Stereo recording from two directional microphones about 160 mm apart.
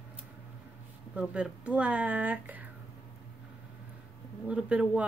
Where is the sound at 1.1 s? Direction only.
5° right (ahead or behind).